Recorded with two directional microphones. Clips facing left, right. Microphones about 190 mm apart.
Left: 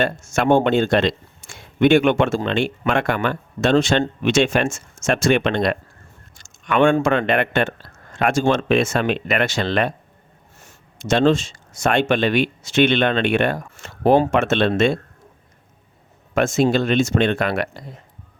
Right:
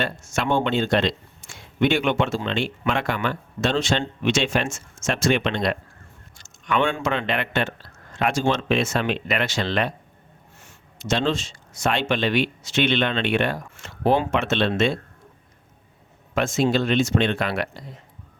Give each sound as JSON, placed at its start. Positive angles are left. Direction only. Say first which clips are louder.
{"t": 0.0, "sound": "speech", "louder": "left 6 dB", "side_deg": 45}
{"t": 16.3, "sound": "speech", "louder": "left 4 dB", "side_deg": 50}